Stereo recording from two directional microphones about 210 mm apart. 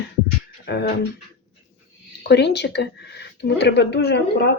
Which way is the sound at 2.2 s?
55° left (ahead or behind).